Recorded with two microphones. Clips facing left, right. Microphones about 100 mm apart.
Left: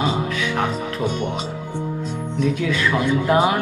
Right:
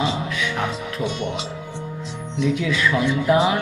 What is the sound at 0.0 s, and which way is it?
Music, 45° left (ahead or behind).